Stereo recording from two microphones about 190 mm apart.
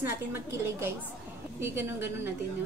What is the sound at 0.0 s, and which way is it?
A woman's voice, 15° right (ahead or behind).